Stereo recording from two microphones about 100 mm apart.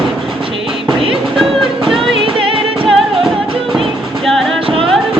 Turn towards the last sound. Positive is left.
turn(degrees=0)  # may be behind; listen again after turning